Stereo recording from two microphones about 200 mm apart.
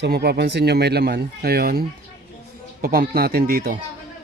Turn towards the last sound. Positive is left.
turn(degrees=-50)  # may be behind; listen again after turning